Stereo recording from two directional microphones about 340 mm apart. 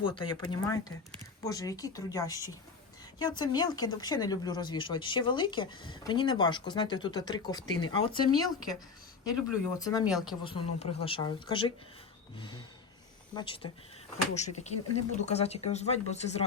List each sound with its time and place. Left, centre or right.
0.0 s speech: centre
9.7 s speech: centre
10.1 s speech: centre
10.4 s speech: centre